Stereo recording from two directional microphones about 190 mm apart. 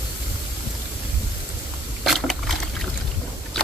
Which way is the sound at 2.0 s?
Centre (ahead or behind).